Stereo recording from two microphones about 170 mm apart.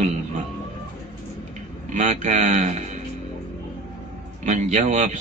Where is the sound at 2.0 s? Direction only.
45° right (ahead or behind).